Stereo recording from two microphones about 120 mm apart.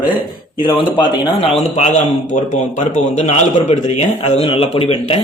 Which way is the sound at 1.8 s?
80° left.